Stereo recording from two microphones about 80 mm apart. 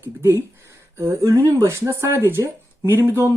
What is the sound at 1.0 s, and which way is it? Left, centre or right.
Speech, right.